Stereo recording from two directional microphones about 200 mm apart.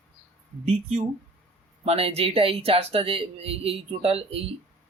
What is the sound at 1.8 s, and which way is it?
Speech, 30° right (ahead or behind).